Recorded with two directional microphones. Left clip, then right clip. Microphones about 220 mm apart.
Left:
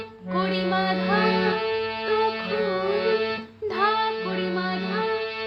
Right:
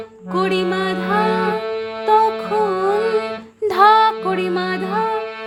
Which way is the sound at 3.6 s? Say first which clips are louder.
Right 11 dB; 55° right (ahead or behind).